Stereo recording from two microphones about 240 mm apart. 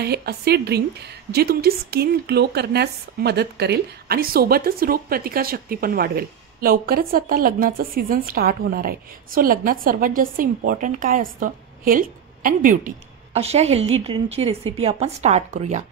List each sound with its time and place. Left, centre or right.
0.0 s speech: right